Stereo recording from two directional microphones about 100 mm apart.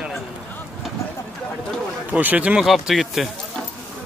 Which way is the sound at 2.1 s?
15° right (ahead or behind).